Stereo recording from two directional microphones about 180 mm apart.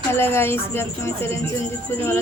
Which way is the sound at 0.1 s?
15° left (ahead or behind).